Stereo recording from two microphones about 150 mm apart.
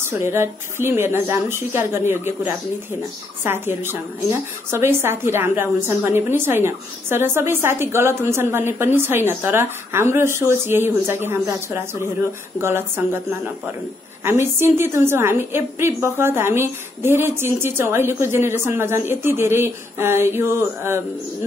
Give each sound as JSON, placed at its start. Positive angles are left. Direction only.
{"t": 0.1, "sound": "a woman's voice", "side_deg": -15}